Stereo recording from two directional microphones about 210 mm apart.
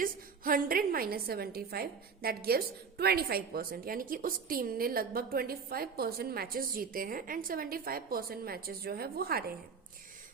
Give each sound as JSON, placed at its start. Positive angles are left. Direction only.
{"t": 0.0, "sound": "a woman's voice", "side_deg": -45}